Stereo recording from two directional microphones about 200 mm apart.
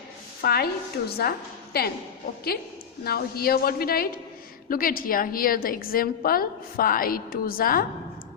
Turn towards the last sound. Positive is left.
turn(degrees=45)  # may be behind; listen again after turning